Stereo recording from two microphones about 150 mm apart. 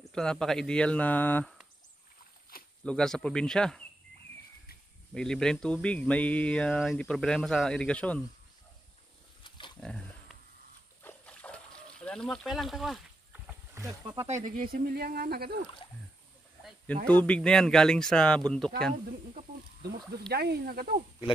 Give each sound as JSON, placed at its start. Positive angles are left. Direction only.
{"t": 0.0, "sound": "speech", "side_deg": 5}
{"t": 2.8, "sound": "speech", "side_deg": 5}
{"t": 5.1, "sound": "speech", "side_deg": 5}
{"t": 9.4, "sound": "pig", "side_deg": 30}
{"t": 9.8, "sound": "pig", "side_deg": 5}
{"t": 11.0, "sound": "a sound", "side_deg": 10}
{"t": 13.8, "sound": "speech", "side_deg": -30}
{"t": 14.2, "sound": "speech", "side_deg": -55}
{"t": 16.8, "sound": "speech", "side_deg": 10}
{"t": 19.8, "sound": "speech", "side_deg": -90}